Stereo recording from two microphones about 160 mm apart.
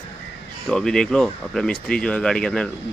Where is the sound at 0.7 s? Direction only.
5° left (ahead or behind).